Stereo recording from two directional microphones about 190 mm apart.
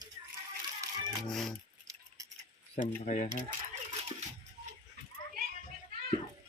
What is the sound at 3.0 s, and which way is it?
Speech, 40° left (ahead or behind).